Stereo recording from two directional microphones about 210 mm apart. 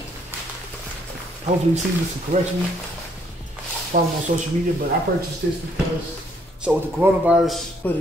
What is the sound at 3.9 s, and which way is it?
Speech, 35° right (ahead or behind).